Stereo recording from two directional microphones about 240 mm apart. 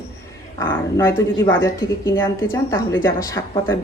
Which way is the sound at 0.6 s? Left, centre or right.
Centre.